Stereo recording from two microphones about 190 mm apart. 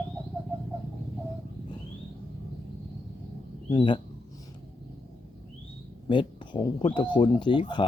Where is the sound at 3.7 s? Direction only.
25° left (ahead or behind).